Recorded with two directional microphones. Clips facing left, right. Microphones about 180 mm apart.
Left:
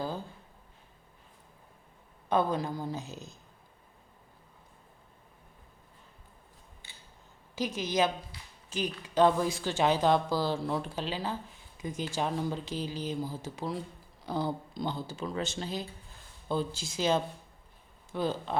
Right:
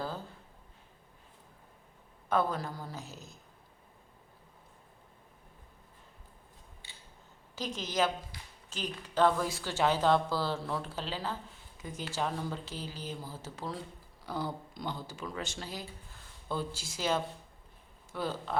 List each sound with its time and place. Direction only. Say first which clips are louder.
2.3 s speech: left 3 dB; 20° left (ahead or behind)
7.5 s speech: left 4 dB; 10° left (ahead or behind)
14.3 s speech: left 4 dB; 25° left (ahead or behind)